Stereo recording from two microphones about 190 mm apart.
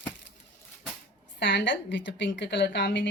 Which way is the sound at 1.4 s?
70° left (ahead or behind).